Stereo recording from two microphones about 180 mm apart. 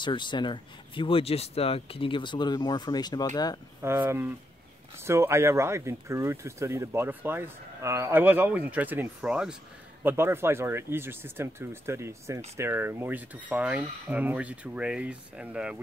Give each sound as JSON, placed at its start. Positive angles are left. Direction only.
{"t": 0.0, "sound": "speech", "side_deg": 25}
{"t": 3.8, "sound": "speech", "side_deg": -15}